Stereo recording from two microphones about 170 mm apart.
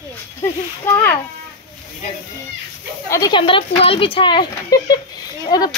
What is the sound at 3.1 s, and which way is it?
A woman's voice, 25° left (ahead or behind).